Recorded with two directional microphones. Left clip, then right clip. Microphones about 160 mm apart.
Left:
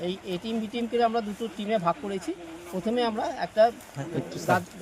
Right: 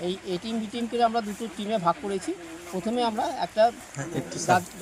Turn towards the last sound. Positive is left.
turn(degrees=5)  # may be behind; listen again after turning